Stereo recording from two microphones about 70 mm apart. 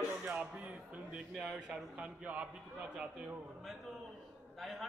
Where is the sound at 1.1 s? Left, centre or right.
Centre.